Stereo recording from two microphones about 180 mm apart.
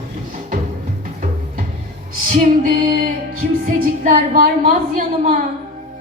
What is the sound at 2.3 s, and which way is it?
A woman's voice, 50° right (ahead or behind).